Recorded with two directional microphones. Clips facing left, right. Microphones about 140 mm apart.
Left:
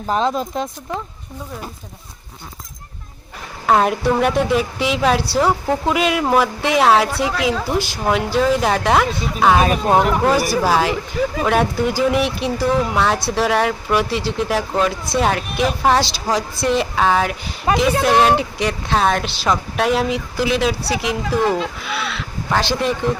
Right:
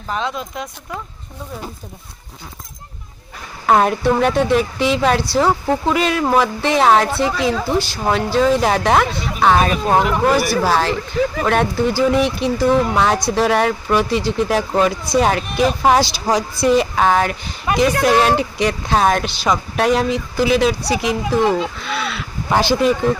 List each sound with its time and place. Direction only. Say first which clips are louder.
0.1 s speech: left 4 dB; 35° left (ahead or behind)
3.7 s speech: right 1 dB; centre (ahead or behind)
22.4 s speech: right 3 dB; 15° right (ahead or behind)